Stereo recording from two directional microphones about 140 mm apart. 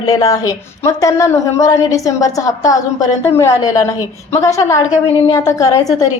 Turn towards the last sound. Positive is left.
turn(degrees=25)  # may be behind; listen again after turning